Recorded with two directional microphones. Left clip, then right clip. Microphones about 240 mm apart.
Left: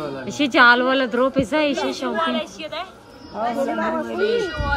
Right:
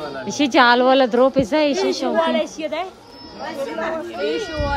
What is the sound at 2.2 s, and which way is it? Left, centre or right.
Speech, right.